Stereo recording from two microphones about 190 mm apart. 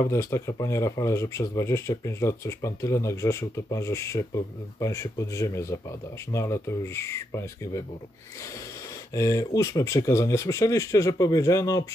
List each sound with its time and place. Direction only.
0.0 s speech: 15° left (ahead or behind)
9.1 s speech: 15° left (ahead or behind)